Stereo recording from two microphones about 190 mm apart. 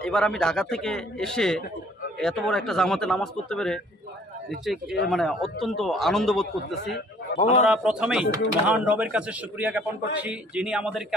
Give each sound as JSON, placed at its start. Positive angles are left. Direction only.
{"t": 0.0, "sound": "a man's voice", "side_deg": 5}
{"t": 7.3, "sound": "a man's voice", "side_deg": 35}
{"t": 7.7, "sound": "a man's voice", "side_deg": -5}